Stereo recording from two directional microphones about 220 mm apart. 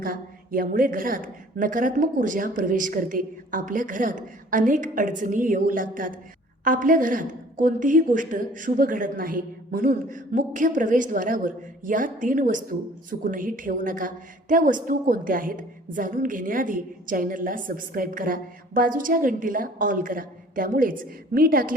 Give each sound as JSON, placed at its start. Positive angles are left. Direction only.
{"t": 0.0, "sound": "a woman's voice", "side_deg": -40}